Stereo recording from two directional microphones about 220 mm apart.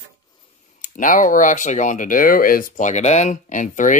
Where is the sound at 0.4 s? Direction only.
35° left (ahead or behind).